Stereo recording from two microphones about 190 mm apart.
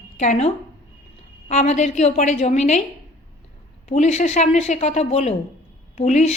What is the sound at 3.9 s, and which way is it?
A woman's voice, 35° left (ahead or behind).